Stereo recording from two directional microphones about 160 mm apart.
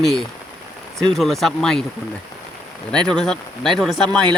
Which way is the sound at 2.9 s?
5° left (ahead or behind).